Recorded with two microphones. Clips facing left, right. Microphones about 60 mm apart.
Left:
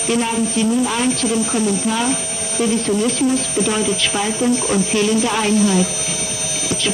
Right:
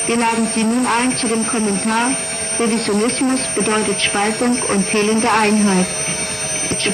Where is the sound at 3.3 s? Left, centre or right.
Right.